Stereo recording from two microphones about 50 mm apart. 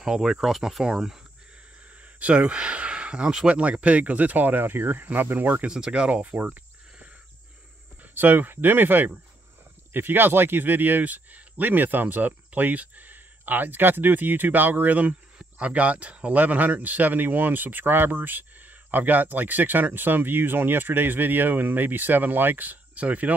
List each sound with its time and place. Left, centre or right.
0.0 s speech: centre
2.1 s speech: right
5.7 s speech: centre
6.3 s speech: right
8.1 s speech: right